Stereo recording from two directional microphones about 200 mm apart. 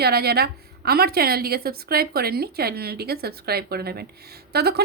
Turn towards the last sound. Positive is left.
turn(degrees=-55)  # may be behind; listen again after turning